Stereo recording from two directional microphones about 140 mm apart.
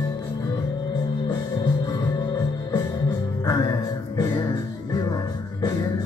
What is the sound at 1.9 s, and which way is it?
Music, 30° left (ahead or behind).